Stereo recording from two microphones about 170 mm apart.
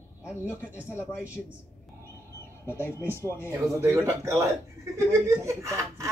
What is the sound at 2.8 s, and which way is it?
Speech, 15° left (ahead or behind).